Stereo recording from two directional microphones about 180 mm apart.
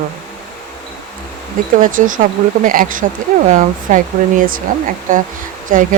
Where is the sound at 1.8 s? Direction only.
45° right (ahead or behind).